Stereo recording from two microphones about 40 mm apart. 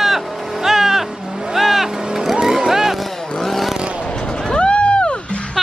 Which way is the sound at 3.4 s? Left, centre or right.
Centre.